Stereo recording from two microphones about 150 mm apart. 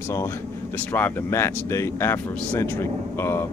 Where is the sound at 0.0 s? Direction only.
15° left (ahead or behind).